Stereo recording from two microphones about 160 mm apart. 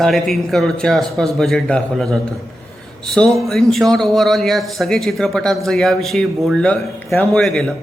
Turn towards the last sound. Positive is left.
turn(degrees=5)  # may be behind; listen again after turning